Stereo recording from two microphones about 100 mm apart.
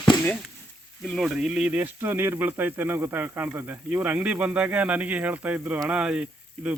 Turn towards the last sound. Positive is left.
turn(degrees=-15)  # may be behind; listen again after turning